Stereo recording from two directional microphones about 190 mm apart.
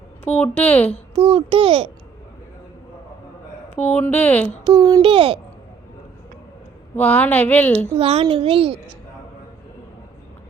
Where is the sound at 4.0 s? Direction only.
10° left (ahead or behind).